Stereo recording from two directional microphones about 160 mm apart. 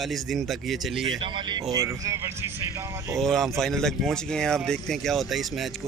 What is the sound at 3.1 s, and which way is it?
Speech, centre (ahead or behind).